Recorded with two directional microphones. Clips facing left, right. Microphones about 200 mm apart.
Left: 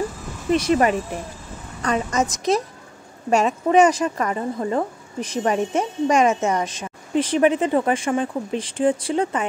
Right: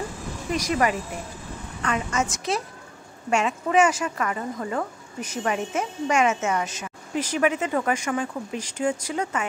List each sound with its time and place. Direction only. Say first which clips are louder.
0.5 s speech: left 6 dB; 30° left (ahead or behind)